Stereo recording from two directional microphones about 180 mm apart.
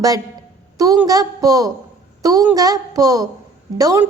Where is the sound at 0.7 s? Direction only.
20° right (ahead or behind).